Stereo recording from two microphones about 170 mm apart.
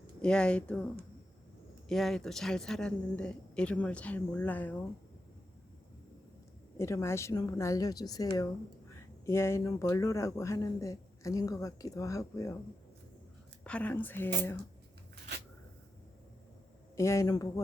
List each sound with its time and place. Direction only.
0.2 s a woman's voice: 5° left (ahead or behind)
1.9 s a woman's voice: centre (ahead or behind)
6.7 s speech: 15° left (ahead or behind)
13.7 s speech: 10° left (ahead or behind)
16.9 s speech: 15° left (ahead or behind)